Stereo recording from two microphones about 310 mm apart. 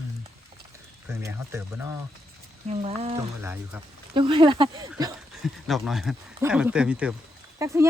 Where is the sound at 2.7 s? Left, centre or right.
Centre.